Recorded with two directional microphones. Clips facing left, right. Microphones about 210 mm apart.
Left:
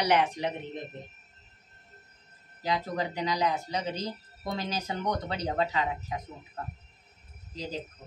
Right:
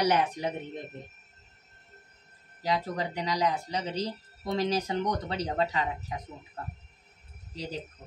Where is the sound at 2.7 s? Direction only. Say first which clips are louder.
Even; 30° right (ahead or behind).